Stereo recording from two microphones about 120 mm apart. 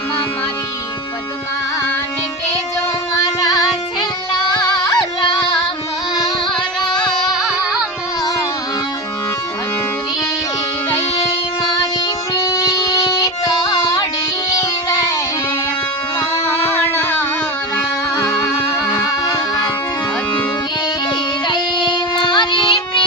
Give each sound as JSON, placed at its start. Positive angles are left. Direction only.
{"t": 3.2, "sound": "music", "side_deg": 35}
{"t": 7.3, "sound": "carnatic music", "side_deg": -5}
{"t": 11.6, "sound": "music", "side_deg": 30}
{"t": 16.9, "sound": "music", "side_deg": 20}
{"t": 21.4, "sound": "child singing", "side_deg": 40}